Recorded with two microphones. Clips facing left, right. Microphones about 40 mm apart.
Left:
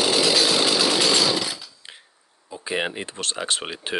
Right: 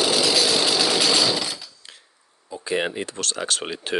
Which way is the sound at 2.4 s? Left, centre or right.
Centre.